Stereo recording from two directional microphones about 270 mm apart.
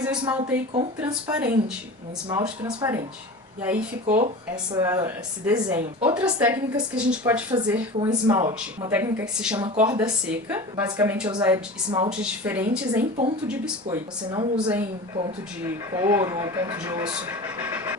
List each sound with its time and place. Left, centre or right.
0.0 s a woman's voice: centre
4.0 s speech: right
4.7 s speech: centre
7.5 s a woman's voice: centre
12.1 s a woman's voice: centre